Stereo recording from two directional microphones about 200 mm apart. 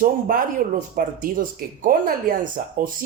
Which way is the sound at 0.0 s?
45° right (ahead or behind).